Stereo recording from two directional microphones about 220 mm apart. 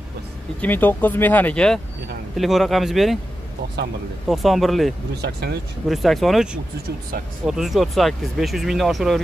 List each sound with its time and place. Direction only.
0.6 s speech: 10° left (ahead or behind)
4.3 s speech: centre (ahead or behind)
5.2 s speech: 50° right (ahead or behind)
5.9 s speech: centre (ahead or behind)